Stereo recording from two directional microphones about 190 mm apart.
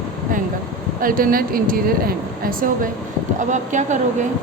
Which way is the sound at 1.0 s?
50° right (ahead or behind).